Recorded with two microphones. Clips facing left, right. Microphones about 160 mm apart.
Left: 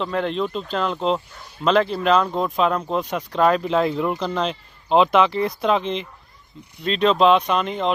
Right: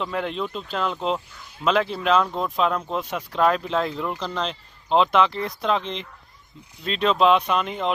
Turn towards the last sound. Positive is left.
turn(degrees=-5)  # may be behind; listen again after turning